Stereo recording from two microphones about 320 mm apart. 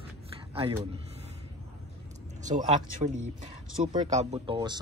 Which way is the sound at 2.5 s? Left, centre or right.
Right.